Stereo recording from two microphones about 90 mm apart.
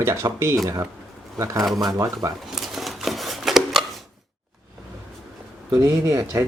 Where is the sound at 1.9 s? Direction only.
40° right (ahead or behind).